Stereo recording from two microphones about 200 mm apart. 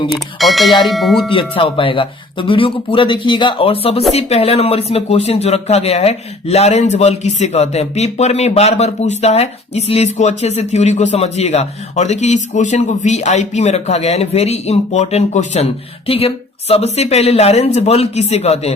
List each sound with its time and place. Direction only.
0.1 s speech: centre (ahead or behind)
1.3 s speech: 25° left (ahead or behind)